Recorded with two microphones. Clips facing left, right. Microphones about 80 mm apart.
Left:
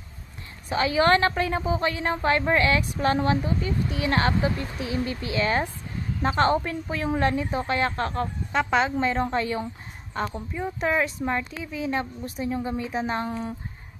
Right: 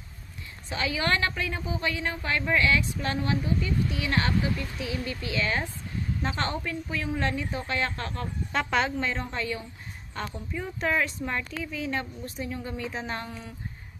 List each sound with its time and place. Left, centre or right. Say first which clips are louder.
0.7 s speech: left 7 dB; left
8.5 s speech: left 3 dB; centre
9.0 s a woman's voice: left 7 dB; left
10.8 s a woman's voice: left 2 dB; centre; by 13.6 s left